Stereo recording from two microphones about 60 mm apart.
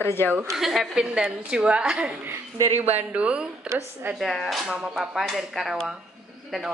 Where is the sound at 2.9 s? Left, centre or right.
Right.